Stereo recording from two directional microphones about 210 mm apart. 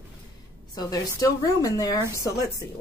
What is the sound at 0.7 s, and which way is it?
A woman's voice, 15° left (ahead or behind).